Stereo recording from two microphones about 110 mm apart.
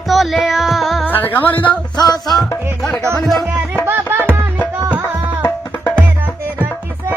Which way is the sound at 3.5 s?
15° right (ahead or behind).